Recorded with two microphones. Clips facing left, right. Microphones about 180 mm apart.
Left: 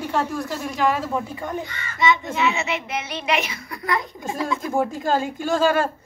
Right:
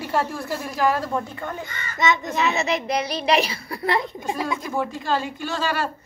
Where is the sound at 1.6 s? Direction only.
45° right (ahead or behind).